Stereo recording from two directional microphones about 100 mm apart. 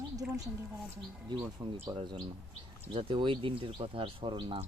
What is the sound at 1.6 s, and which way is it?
Speech, 30° right (ahead or behind).